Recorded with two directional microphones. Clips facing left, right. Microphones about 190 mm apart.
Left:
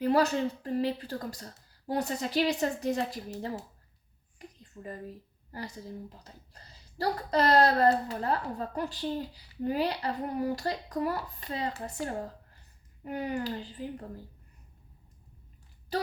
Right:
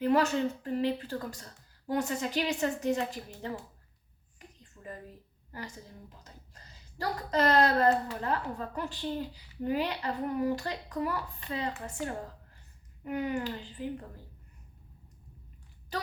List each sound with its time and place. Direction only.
0.0 s a woman's voice: 35° left (ahead or behind)
4.4 s a sound: 35° left (ahead or behind)
5.5 s a woman's voice: 35° left (ahead or behind)
13.1 s a woman's voice: 35° left (ahead or behind)